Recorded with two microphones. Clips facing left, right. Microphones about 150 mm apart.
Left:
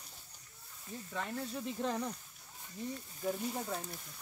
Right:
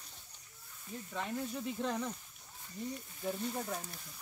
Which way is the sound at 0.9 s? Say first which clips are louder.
Right 1 dB; 5° right (ahead or behind).